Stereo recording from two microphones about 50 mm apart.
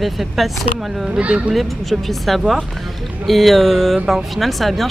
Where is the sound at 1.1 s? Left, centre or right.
Right.